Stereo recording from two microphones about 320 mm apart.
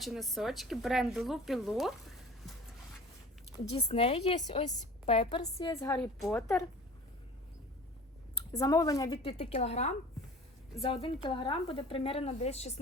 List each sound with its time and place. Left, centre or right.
0.0 s speech: centre
3.7 s speech: centre
8.5 s speech: centre